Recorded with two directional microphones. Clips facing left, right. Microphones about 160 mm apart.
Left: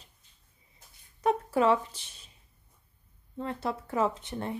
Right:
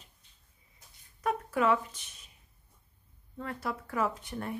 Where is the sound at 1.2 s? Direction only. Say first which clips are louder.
Left 4 dB; 30° left (ahead or behind).